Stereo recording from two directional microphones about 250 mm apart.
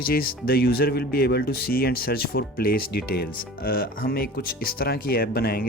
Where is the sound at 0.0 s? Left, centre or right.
Left.